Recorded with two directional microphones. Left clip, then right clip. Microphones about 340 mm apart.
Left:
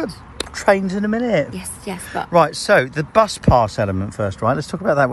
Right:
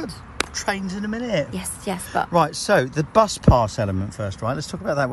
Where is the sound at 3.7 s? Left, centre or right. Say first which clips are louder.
Left 5 dB; centre.